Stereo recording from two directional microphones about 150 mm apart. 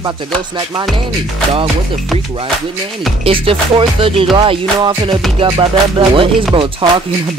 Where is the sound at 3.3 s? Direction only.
35° right (ahead or behind).